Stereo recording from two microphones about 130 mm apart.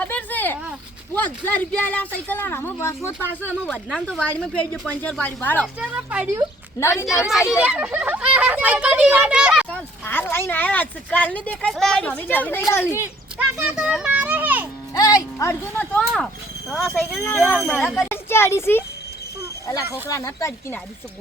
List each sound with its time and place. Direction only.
0.0 s a sound: 10° left (ahead or behind)
1.1 s speech: 10° left (ahead or behind)
3.9 s speech: 5° left (ahead or behind)
5.9 s a child's voice: 10° right (ahead or behind)
6.7 s speech: 20° left (ahead or behind)
7.3 s a child's voice: 5° right (ahead or behind)
10.1 s speech: 15° left (ahead or behind)
13.6 s a child's voice: 10° right (ahead or behind)
14.9 s speech: 30° left (ahead or behind)
15.9 s speech: 5° left (ahead or behind)
16.9 s speech: 10° left (ahead or behind); by 18.1 s 5° right (ahead or behind)
18.1 s speech: 20° left (ahead or behind)
19.9 s speech: 25° left (ahead or behind)